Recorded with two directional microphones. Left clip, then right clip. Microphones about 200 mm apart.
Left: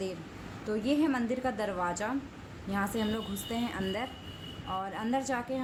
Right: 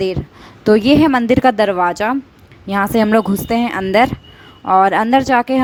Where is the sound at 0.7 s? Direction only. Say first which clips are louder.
Right 19 dB; 50° right (ahead or behind).